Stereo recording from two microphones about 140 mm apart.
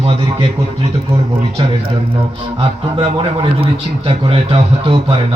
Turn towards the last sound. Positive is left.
turn(degrees=-40)  # may be behind; listen again after turning